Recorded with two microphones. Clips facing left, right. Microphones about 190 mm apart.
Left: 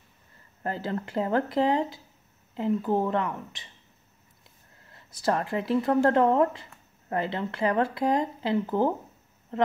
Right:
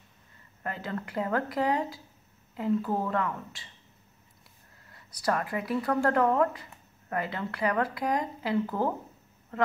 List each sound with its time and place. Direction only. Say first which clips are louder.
0.7 s speech: left 4 dB; 30° left (ahead or behind)
4.8 s speech: left 2 dB; 25° left (ahead or behind)